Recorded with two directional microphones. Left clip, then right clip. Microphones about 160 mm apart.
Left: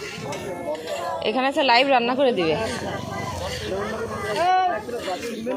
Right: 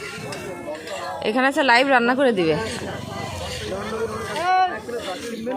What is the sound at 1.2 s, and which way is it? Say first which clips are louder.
A woman's voice: right 3 dB; 40° right (ahead or behind).